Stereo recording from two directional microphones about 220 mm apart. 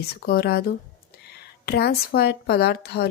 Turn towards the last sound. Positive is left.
turn(degrees=50)  # may be behind; listen again after turning